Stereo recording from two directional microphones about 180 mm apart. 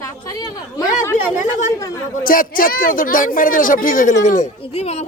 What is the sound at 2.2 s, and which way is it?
Speech, 50° left (ahead or behind).